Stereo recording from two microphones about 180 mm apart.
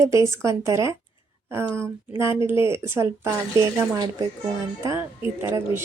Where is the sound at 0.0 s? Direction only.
15° right (ahead or behind).